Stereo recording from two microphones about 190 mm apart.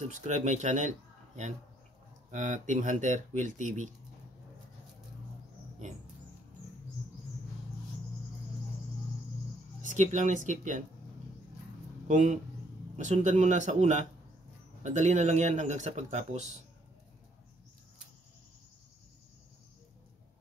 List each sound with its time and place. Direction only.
0.1 s speech: 40° right (ahead or behind)
9.8 s speech: 40° right (ahead or behind)
12.1 s speech: 40° right (ahead or behind)